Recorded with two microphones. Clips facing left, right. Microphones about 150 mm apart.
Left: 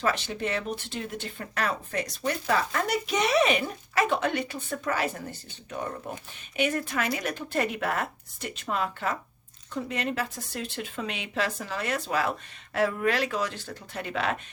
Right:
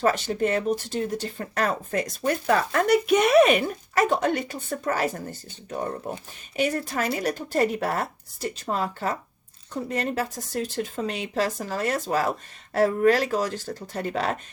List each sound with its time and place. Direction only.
0.0 s speech: 45° right (ahead or behind)